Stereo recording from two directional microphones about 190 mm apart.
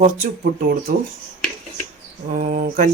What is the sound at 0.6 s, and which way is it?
Speech, 50° right (ahead or behind).